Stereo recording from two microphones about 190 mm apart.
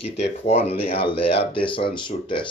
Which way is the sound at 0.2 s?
35° left (ahead or behind).